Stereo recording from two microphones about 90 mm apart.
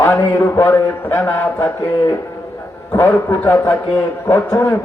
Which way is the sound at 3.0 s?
25° left (ahead or behind).